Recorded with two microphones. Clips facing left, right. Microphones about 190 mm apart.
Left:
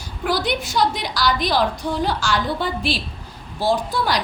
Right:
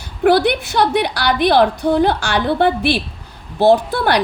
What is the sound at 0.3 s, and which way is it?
A woman's voice, 60° right (ahead or behind).